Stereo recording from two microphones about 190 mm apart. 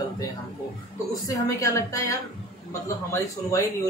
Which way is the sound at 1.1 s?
15° left (ahead or behind).